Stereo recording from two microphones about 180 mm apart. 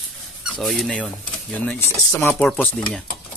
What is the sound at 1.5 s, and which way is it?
Speech, 5° left (ahead or behind).